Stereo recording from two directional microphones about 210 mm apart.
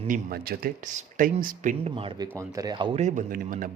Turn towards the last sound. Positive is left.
turn(degrees=-40)  # may be behind; listen again after turning